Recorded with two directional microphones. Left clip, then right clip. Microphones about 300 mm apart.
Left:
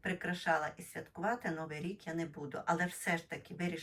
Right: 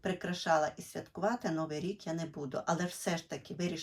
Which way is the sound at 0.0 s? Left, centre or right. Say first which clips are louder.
Right 1 dB; centre.